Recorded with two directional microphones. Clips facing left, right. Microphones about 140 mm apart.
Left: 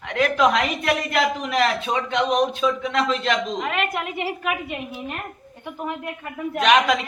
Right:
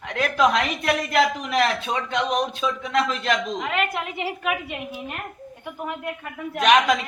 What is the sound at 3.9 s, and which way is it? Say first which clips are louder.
A woman's voice: left 2 dB; 15° right (ahead or behind).